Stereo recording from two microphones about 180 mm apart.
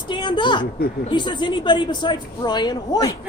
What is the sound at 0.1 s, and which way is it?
Speech, 25° left (ahead or behind).